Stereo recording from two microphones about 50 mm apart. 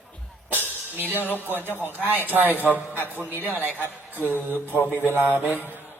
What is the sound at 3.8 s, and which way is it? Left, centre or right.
A woman's voice, left.